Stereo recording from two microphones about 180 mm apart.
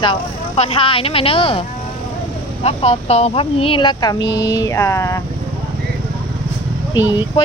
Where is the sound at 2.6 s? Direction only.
35° left (ahead or behind); by 5.2 s 15° left (ahead or behind).